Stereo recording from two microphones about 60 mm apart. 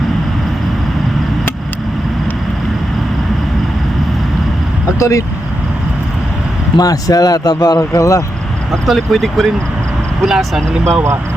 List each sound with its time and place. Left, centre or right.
4.9 s speech: left
6.8 s speech: left
8.7 s speech: centre